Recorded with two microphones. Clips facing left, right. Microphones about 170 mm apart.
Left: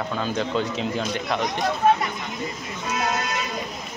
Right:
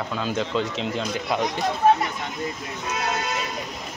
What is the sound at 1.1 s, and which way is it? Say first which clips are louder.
Speech: right 1 dB; 10° right (ahead or behind).